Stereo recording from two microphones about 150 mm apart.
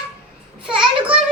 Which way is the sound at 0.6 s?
5° right (ahead or behind).